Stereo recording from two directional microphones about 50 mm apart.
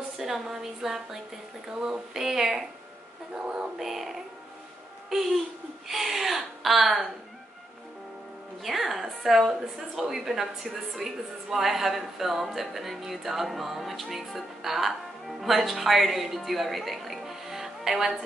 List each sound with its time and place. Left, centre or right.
0.2 s a woman's voice: centre
8.6 s a woman's voice: centre